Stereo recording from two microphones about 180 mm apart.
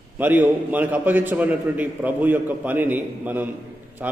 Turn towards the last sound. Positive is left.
turn(degrees=-10)  # may be behind; listen again after turning